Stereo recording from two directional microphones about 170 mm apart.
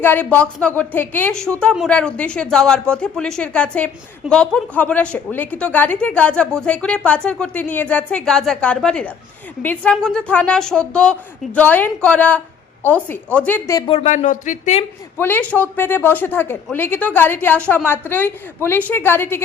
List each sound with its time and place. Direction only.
0.0 s a woman's voice: 10° left (ahead or behind)
13.8 s speech: 40° left (ahead or behind)
15.2 s a woman's voice: 10° left (ahead or behind)